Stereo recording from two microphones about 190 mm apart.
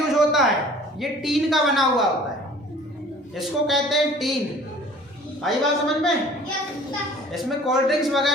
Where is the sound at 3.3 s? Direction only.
Centre (ahead or behind).